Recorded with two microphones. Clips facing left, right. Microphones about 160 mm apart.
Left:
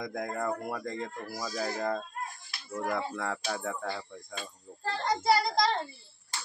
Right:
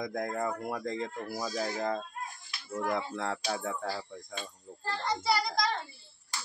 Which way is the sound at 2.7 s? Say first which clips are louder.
Even; 20° right (ahead or behind).